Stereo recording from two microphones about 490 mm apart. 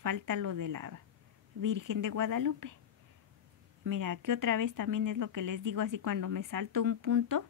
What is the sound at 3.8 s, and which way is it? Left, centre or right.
Speech, right.